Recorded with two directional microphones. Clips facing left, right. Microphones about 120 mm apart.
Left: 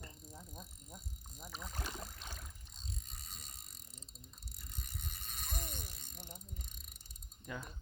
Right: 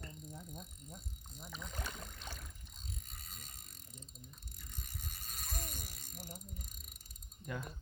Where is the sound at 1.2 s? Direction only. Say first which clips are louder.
Left 1 dB; 10° left (ahead or behind).